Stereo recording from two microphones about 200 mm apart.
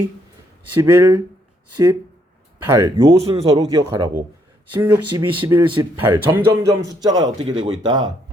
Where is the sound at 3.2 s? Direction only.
30° right (ahead or behind).